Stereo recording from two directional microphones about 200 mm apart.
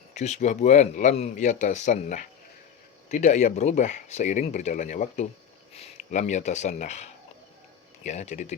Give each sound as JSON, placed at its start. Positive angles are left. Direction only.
{"t": 0.1, "sound": "speech", "side_deg": 35}